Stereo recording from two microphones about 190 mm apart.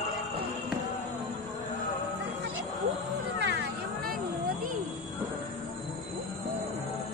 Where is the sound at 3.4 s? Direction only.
60° right (ahead or behind).